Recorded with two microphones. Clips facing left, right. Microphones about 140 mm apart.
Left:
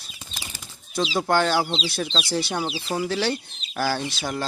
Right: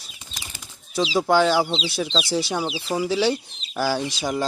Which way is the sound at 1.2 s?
5° right (ahead or behind).